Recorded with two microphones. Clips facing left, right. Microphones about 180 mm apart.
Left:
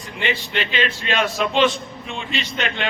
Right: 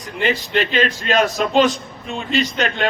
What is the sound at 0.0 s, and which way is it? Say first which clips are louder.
A man's voice: right 4 dB; 40° right (ahead or behind).